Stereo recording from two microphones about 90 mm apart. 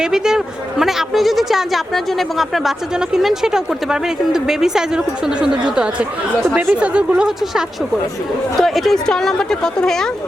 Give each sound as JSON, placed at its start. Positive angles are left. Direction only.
{"t": 0.0, "sound": "a woman's voice", "side_deg": -5}